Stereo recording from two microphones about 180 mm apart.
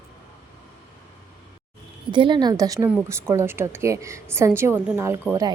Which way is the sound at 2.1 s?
25° right (ahead or behind).